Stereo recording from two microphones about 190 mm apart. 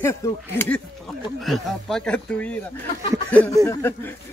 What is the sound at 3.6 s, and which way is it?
Speech, 10° left (ahead or behind).